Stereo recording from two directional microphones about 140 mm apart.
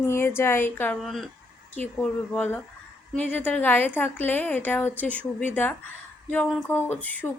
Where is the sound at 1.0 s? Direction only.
Centre (ahead or behind).